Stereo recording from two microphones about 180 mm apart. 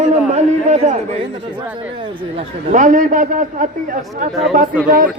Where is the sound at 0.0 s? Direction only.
40° right (ahead or behind).